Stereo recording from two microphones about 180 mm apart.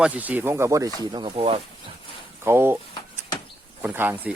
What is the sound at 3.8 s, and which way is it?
Speech, 10° right (ahead or behind).